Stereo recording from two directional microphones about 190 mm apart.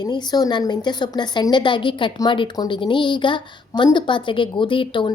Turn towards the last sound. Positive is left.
turn(degrees=25)  # may be behind; listen again after turning